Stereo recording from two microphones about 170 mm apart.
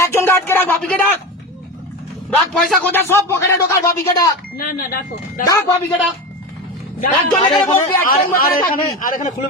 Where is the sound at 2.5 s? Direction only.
Centre (ahead or behind).